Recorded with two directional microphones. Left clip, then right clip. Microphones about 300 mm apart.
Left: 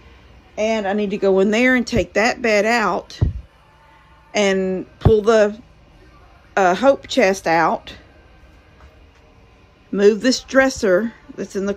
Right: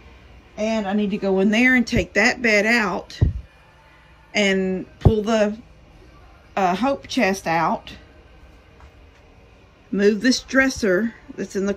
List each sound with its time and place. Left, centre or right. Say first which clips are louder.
0.6 s speech: left 4 dB; centre
4.3 s speech: left 2 dB; centre
9.9 s speech: left 4 dB; centre